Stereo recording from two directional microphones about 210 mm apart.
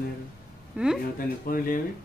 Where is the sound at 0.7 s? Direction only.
5° right (ahead or behind).